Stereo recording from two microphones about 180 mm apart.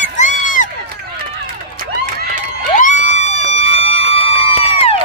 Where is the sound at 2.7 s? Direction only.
40° left (ahead or behind).